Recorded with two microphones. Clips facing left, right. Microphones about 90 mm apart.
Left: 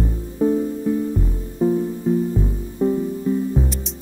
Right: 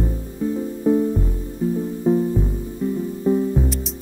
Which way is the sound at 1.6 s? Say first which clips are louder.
Left 5 dB; 30° left (ahead or behind).